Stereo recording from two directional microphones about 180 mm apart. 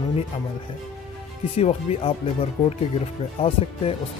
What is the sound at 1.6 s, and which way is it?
Speech, 35° left (ahead or behind).